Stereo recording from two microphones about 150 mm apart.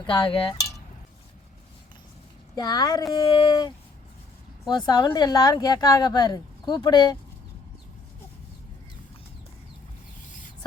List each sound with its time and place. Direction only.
0.0 s cowbell: 30° left (ahead or behind)
2.6 s speech: 25° left (ahead or behind)
4.9 s speech: 25° left (ahead or behind)